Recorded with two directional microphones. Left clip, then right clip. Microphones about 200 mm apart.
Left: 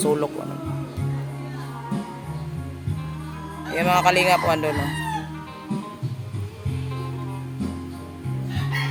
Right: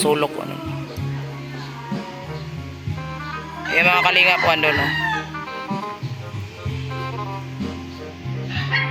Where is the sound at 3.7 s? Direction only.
5° left (ahead or behind).